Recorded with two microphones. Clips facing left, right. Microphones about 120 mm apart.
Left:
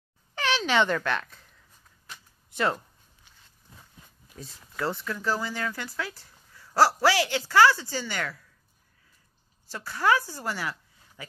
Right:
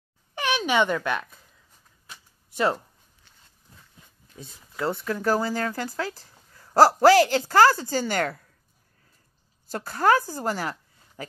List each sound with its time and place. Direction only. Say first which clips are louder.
0.4 s speech: right 2 dB; 15° right (ahead or behind)
2.0 s a sound: left 1 dB; 15° right (ahead or behind)
4.4 s speech: right 2 dB; 25° right (ahead or behind)
5.0 s speech: right 5 dB; 45° right (ahead or behind)
9.7 s a woman's voice: right 3 dB; 45° right (ahead or behind)